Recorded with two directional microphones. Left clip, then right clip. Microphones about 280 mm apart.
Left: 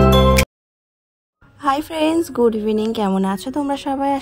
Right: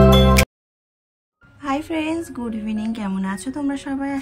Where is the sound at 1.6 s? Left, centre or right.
Centre.